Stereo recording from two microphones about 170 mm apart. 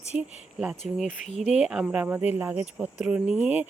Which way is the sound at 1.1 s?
45° left (ahead or behind).